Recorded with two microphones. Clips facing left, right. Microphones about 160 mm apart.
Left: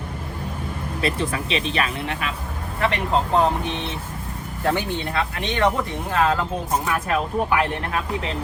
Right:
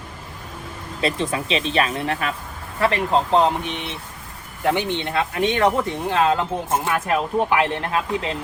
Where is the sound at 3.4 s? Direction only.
15° right (ahead or behind).